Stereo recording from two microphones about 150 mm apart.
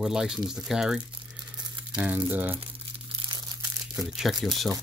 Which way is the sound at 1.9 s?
10° right (ahead or behind).